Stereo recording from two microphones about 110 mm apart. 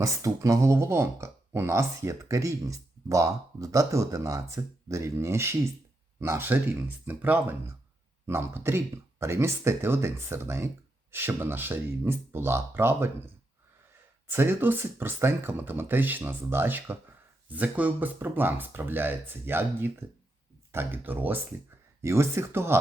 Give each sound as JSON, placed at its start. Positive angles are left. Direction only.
{"t": 0.0, "sound": "speech", "side_deg": -30}
{"t": 14.3, "sound": "speech", "side_deg": -20}